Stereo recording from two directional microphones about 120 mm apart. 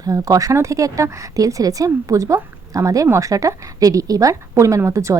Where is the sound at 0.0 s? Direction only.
30° right (ahead or behind).